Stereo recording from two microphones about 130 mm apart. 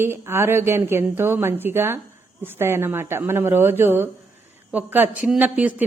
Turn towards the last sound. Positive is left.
turn(degrees=-10)  # may be behind; listen again after turning